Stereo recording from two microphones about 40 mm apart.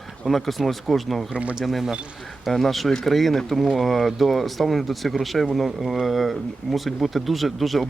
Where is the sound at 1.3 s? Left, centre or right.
Right.